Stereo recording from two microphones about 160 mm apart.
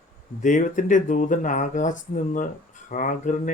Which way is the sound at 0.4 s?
55° left (ahead or behind).